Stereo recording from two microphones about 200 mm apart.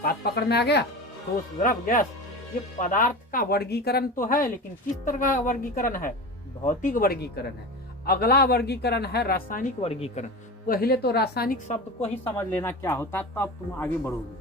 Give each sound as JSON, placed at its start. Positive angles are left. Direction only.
{"t": 0.0, "sound": "speech", "side_deg": 50}
{"t": 1.6, "sound": "a woman's voice", "side_deg": 40}
{"t": 9.8, "sound": "speech", "side_deg": 30}
{"t": 10.7, "sound": "speech", "side_deg": 50}
{"t": 12.4, "sound": "speech", "side_deg": 10}